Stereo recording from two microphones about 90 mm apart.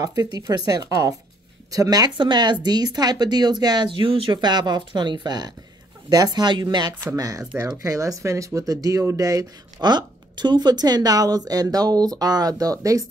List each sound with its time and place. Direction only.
0.0 s speech: 45° right (ahead or behind); by 4.3 s 75° right (ahead or behind)
4.3 s speech: 55° right (ahead or behind)
7.2 s speech: 40° right (ahead or behind)